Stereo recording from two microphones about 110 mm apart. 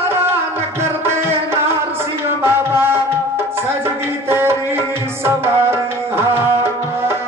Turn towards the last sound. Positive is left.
turn(degrees=-20)  # may be behind; listen again after turning